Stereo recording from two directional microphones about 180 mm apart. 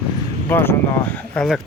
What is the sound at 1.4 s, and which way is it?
Speech, centre (ahead or behind).